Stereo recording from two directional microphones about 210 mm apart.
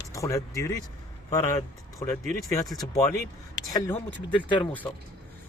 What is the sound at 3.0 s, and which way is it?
Speech, 45° left (ahead or behind).